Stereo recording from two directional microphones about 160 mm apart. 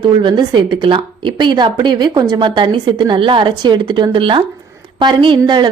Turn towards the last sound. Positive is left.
turn(degrees=-30)  # may be behind; listen again after turning